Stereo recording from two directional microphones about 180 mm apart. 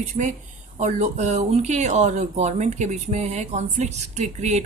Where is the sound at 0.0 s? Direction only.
40° right (ahead or behind).